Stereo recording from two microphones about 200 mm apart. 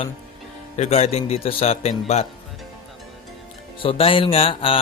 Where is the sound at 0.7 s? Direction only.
30° left (ahead or behind).